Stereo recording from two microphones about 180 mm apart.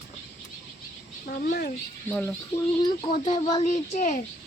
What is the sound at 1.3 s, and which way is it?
Speech, 55° left (ahead or behind).